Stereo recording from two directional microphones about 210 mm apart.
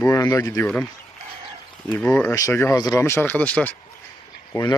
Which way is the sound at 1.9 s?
5° left (ahead or behind).